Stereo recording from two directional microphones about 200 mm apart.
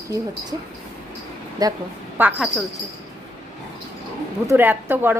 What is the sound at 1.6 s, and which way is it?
Speech, 20° right (ahead or behind).